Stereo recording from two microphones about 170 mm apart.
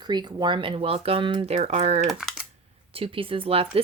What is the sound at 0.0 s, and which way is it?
Speech, 25° right (ahead or behind).